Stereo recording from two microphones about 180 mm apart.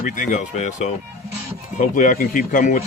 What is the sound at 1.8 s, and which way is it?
A man's voice, 50° left (ahead or behind).